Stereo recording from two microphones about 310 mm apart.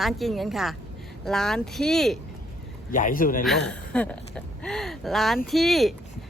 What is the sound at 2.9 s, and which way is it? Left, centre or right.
Speech, left.